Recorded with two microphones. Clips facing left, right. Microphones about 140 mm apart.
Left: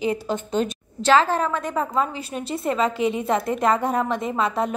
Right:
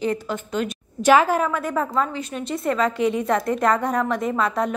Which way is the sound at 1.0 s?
15° right (ahead or behind).